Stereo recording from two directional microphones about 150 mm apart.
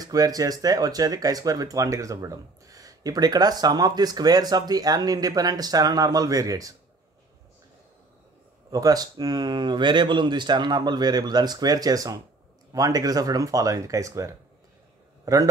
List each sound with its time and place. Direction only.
0.0 s speech: 25° right (ahead or behind)
8.6 s speech: 25° right (ahead or behind)